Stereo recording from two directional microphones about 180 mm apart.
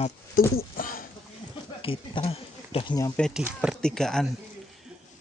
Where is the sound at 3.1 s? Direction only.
5° left (ahead or behind).